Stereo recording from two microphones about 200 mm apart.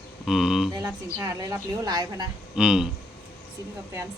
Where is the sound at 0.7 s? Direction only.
15° right (ahead or behind).